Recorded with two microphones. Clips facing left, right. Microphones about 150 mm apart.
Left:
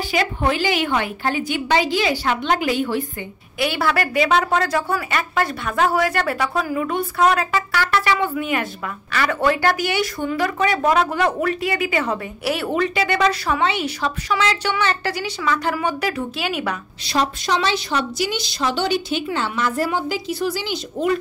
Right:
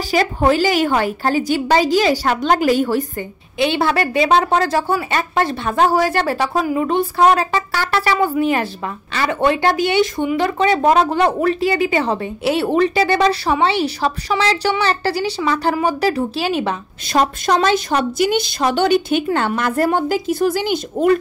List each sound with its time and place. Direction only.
0.1 s a woman's voice: 40° right (ahead or behind)
3.5 s a woman's voice: 25° right (ahead or behind)
17.0 s a woman's voice: 50° right (ahead or behind)